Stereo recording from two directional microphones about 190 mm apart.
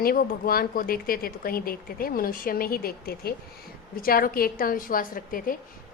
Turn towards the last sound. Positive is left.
turn(degrees=50)  # may be behind; listen again after turning